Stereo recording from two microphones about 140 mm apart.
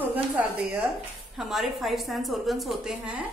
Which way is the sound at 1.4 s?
Centre (ahead or behind).